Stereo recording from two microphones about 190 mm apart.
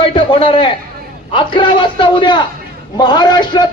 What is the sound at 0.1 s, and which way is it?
A man's voice, 30° left (ahead or behind).